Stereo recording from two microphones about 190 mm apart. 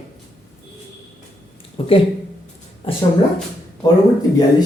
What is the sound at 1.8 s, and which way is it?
Speech, 30° left (ahead or behind).